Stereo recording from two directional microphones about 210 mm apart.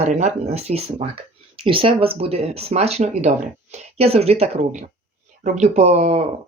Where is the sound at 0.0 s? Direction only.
35° right (ahead or behind).